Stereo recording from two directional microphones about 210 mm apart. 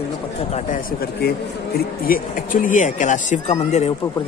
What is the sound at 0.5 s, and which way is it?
Speech, 35° left (ahead or behind).